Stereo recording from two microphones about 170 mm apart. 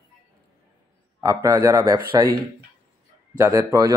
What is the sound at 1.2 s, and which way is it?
A man's voice, 15° right (ahead or behind).